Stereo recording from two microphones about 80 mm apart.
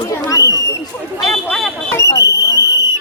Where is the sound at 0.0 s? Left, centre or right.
Left.